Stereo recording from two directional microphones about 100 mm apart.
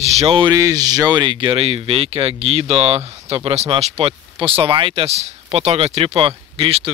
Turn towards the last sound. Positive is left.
turn(degrees=-70)  # may be behind; listen again after turning